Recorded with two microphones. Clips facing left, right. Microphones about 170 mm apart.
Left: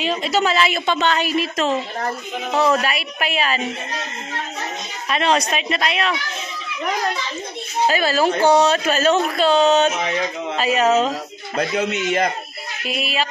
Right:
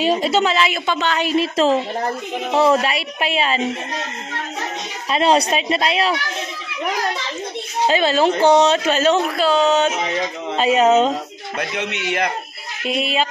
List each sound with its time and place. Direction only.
0.0 s a woman's voice: 40° right (ahead or behind)
0.3 s a woman's voice: 20° right (ahead or behind)
0.9 s a woman's voice: 5° right (ahead or behind)
1.2 s speech: 30° right (ahead or behind)
5.1 s a woman's voice: 30° right (ahead or behind)
7.8 s speech: 20° right (ahead or behind)
9.5 s speech: 20° left (ahead or behind)
10.6 s speech: 25° right (ahead or behind)
12.8 s speech: 25° right (ahead or behind)